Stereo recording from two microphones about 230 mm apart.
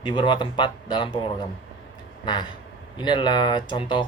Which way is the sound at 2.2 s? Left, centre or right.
Centre.